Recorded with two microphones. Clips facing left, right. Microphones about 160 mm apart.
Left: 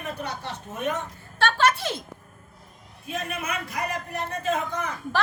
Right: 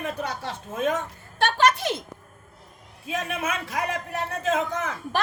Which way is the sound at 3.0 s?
90° right.